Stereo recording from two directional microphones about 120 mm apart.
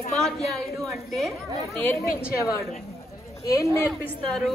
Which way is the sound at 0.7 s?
Centre (ahead or behind).